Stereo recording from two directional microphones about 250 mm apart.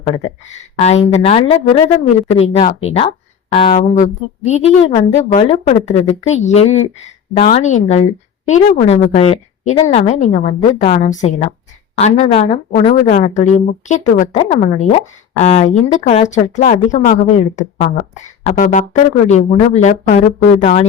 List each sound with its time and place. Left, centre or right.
0.8 s speech: left